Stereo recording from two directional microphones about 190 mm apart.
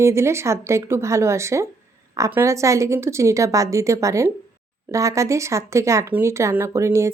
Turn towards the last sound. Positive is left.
turn(degrees=-15)  # may be behind; listen again after turning